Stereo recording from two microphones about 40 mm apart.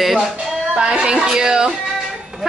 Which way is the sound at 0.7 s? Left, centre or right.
Right.